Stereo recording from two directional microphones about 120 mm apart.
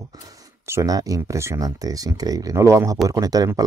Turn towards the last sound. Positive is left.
turn(degrees=-30)  # may be behind; listen again after turning